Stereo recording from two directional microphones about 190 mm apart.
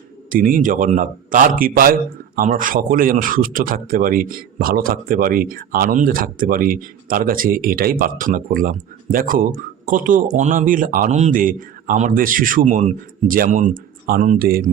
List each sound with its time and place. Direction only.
0.3 s speech: 45° right (ahead or behind)